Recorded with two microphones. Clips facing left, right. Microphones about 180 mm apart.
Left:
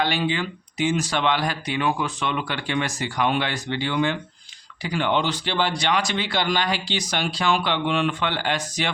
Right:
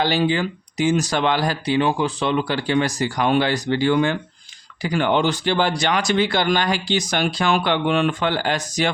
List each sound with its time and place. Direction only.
0.0 s speech: 35° right (ahead or behind)